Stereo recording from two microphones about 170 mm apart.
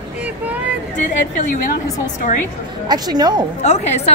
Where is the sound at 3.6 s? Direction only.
40° left (ahead or behind).